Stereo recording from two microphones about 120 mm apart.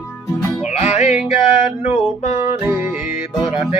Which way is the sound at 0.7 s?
80° left.